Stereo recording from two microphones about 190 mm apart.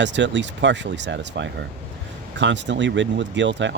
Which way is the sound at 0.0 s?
70° right (ahead or behind).